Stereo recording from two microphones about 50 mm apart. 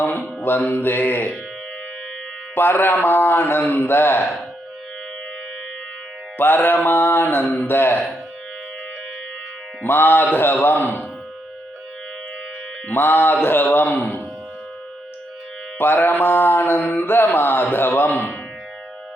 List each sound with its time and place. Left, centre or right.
0.0 s mantra: left
0.7 s a man's voice: left
2.6 s a man's voice: left
6.3 s a man's voice: left
9.8 s a man's voice: left
12.9 s a man's voice: left
15.8 s a man's voice: left